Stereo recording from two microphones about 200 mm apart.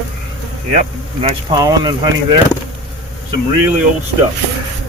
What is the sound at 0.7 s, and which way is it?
Speech, 30° right (ahead or behind).